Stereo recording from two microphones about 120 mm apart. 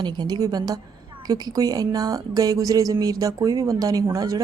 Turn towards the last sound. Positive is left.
turn(degrees=-30)  # may be behind; listen again after turning